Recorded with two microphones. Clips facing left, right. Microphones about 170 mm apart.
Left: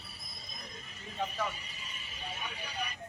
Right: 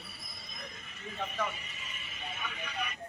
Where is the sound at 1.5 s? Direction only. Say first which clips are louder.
Right 1 dB; 35° left (ahead or behind).